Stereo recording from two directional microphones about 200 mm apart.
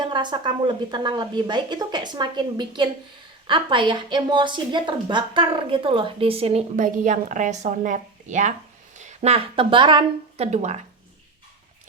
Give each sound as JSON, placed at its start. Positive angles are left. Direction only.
{"t": 0.0, "sound": "a woman's voice", "side_deg": -20}